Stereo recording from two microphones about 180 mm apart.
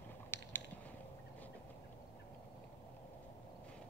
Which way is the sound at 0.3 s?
10° left (ahead or behind).